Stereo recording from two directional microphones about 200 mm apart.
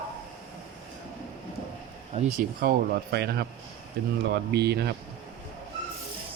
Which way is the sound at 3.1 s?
55° right (ahead or behind).